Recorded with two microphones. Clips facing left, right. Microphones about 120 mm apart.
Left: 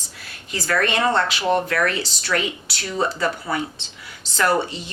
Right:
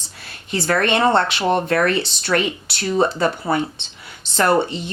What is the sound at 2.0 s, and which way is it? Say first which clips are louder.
Speech: right 5 dB; 60° right (ahead or behind).